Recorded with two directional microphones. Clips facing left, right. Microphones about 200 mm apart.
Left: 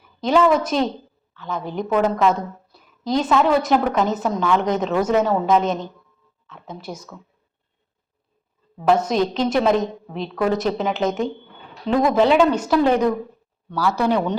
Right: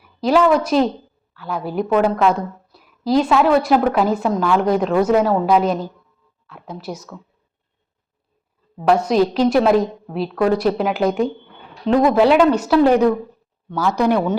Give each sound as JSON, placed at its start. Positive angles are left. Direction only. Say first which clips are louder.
{"t": 0.0, "sound": "a woman's voice", "louder": "right 2 dB", "side_deg": -5}
{"t": 2.7, "sound": "a sound", "louder": "right 5 dB", "side_deg": -5}
{"t": 3.7, "sound": "a woman's voice", "louder": "right 3 dB", "side_deg": -5}
{"t": 8.9, "sound": "a woman's voice", "louder": "right 3 dB", "side_deg": -5}